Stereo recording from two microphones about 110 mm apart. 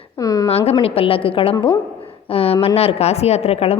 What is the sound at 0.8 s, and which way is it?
A woman's voice, 60° left (ahead or behind).